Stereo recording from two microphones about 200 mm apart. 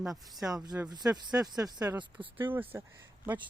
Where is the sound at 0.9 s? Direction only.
20° right (ahead or behind).